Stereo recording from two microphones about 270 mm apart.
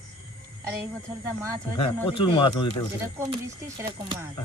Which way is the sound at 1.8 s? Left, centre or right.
Centre.